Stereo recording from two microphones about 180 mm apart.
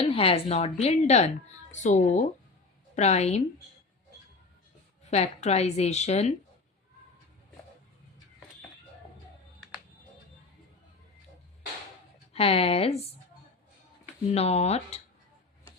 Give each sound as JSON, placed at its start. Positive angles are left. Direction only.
{"t": 0.0, "sound": "a woman's voice", "side_deg": 30}
{"t": 5.1, "sound": "a woman's voice", "side_deg": 35}
{"t": 12.3, "sound": "a woman's voice", "side_deg": 35}
{"t": 14.3, "sound": "a woman's voice", "side_deg": 35}